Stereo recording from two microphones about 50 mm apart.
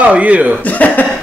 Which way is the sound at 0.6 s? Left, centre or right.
Left.